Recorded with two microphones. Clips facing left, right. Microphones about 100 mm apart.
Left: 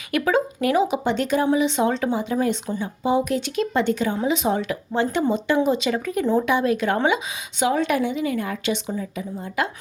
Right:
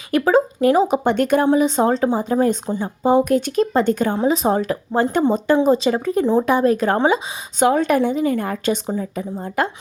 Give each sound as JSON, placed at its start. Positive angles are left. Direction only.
{"t": 0.1, "sound": "speech", "side_deg": -35}
{"t": 1.5, "sound": "a woman's voice", "side_deg": -40}